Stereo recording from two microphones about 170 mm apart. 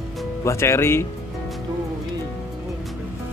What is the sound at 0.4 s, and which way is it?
Speech, 15° left (ahead or behind).